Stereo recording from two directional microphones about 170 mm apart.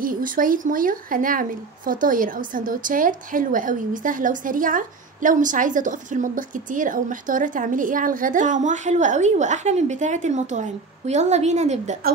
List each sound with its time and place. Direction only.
0.0 s speech: 55° right (ahead or behind)